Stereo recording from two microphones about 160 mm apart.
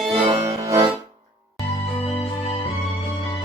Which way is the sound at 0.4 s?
20° right (ahead or behind).